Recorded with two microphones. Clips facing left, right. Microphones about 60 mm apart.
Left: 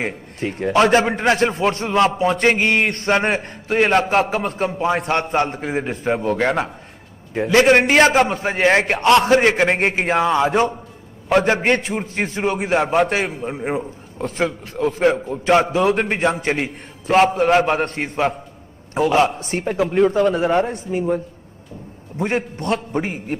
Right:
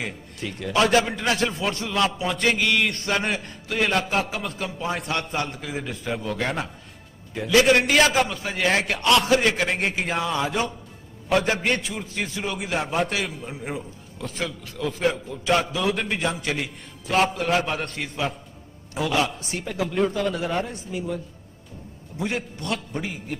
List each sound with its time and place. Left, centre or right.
0.0 s a man's voice: left
8.4 s a man's voice: left
20.0 s a man's voice: left